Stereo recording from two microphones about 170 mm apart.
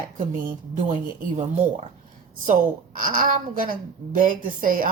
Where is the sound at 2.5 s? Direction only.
50° right (ahead or behind).